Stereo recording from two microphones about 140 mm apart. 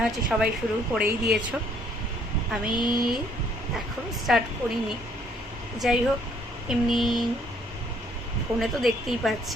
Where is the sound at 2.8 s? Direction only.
30° left (ahead or behind).